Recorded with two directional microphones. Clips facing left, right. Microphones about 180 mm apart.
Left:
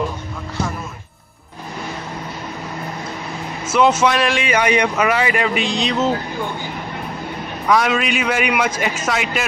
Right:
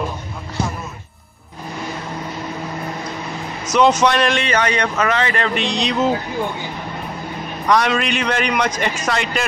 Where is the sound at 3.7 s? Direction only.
5° left (ahead or behind).